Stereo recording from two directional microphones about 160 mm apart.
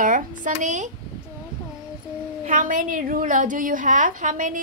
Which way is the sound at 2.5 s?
55° right (ahead or behind).